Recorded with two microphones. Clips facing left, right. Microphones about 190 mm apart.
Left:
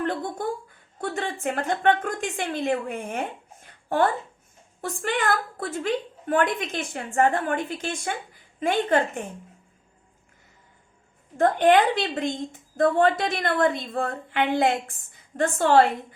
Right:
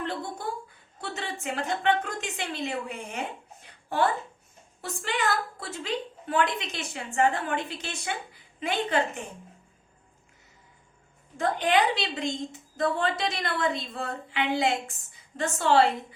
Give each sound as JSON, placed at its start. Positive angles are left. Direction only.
{"t": 0.0, "sound": "a woman's voice", "side_deg": 50}
{"t": 11.3, "sound": "a woman's voice", "side_deg": 50}